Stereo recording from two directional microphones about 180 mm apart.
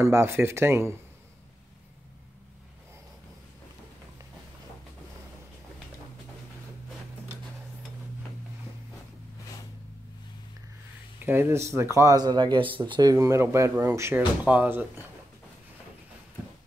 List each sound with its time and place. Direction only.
0.0 s speech: 15° right (ahead or behind)
11.1 s speech: 10° right (ahead or behind)